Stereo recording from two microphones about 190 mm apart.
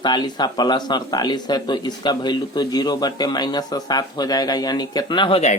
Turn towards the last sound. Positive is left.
turn(degrees=30)  # may be behind; listen again after turning